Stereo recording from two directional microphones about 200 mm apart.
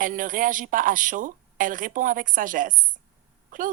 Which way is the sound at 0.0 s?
40° right (ahead or behind).